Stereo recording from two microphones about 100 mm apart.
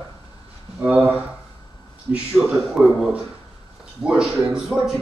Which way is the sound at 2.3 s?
5° right (ahead or behind).